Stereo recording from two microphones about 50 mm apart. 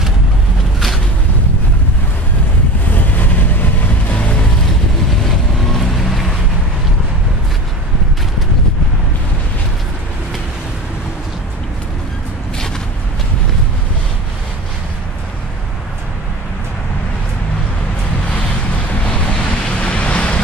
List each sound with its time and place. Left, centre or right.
2.9 s vehicle: left
4.1 s music: left
5.7 s boat: centre
19.0 s boat: left